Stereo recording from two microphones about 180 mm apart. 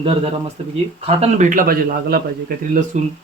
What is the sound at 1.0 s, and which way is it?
A man's voice, 40° right (ahead or behind).